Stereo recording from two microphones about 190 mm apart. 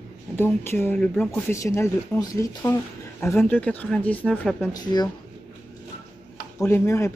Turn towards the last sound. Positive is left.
turn(degrees=15)  # may be behind; listen again after turning